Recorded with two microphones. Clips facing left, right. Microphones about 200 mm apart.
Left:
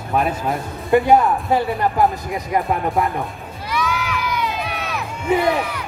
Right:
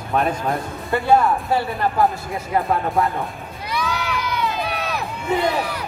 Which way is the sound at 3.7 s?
35° right (ahead or behind).